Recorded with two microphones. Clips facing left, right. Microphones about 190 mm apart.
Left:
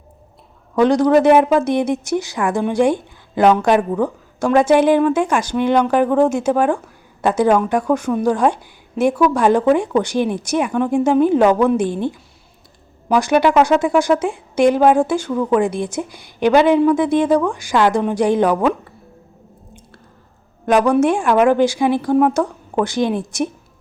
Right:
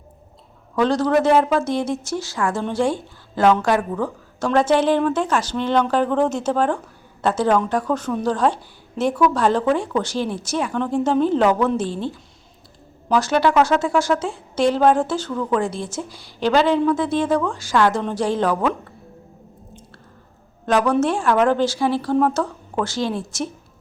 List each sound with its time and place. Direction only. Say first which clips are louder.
0.8 s speech: left 5 dB; 15° left (ahead or behind)
20.7 s speech: left 4 dB; 15° left (ahead or behind)